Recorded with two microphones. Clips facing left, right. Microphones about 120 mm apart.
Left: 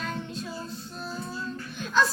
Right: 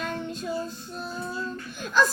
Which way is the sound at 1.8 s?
45° right (ahead or behind).